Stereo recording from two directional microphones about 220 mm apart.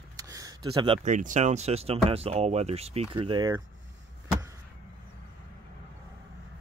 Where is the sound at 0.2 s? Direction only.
15° right (ahead or behind).